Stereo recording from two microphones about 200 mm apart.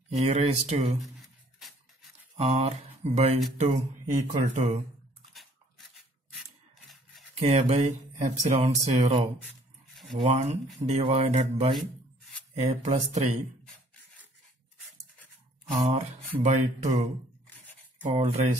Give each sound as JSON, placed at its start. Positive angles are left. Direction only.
{"t": 0.1, "sound": "speech", "side_deg": -35}
{"t": 1.0, "sound": "a sound", "side_deg": 0}
{"t": 2.3, "sound": "speech", "side_deg": -30}
{"t": 5.3, "sound": "dog", "side_deg": 0}
{"t": 7.3, "sound": "speech", "side_deg": -30}
{"t": 15.8, "sound": "speech", "side_deg": -35}
{"t": 18.0, "sound": "speech", "side_deg": -30}